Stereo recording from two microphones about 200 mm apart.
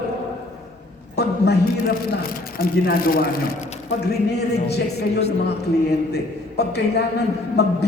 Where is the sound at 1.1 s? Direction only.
55° left (ahead or behind).